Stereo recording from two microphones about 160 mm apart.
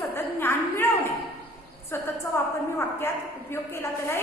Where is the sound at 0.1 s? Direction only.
15° left (ahead or behind).